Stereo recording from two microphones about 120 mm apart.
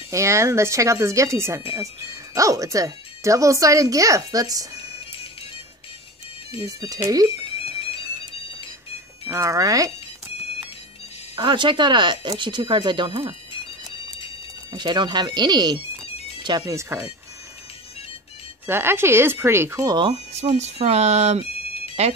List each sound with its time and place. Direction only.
0.1 s speech: 25° right (ahead or behind)
6.6 s speech: 30° right (ahead or behind)
7.2 s music: 50° left (ahead or behind)
9.3 s speech: 25° right (ahead or behind)
11.3 s speech: 40° right (ahead or behind)
14.7 s speech: 40° right (ahead or behind)
18.7 s speech: 20° right (ahead or behind)
19.9 s speech: 40° right (ahead or behind)
20.3 s speech: 65° right (ahead or behind)